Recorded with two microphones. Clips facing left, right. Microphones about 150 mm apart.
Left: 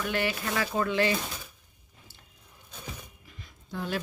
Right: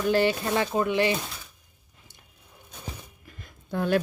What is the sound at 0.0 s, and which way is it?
Speech, 30° right (ahead or behind).